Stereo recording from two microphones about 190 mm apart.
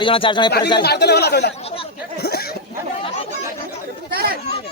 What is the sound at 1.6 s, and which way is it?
Speech, 30° left (ahead or behind).